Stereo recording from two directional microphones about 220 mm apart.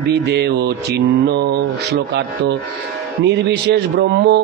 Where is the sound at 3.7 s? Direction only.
50° right (ahead or behind).